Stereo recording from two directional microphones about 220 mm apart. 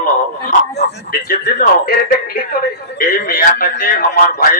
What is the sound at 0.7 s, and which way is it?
Speech, 45° left (ahead or behind).